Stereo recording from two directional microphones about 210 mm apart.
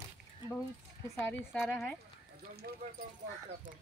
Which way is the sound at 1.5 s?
5° left (ahead or behind).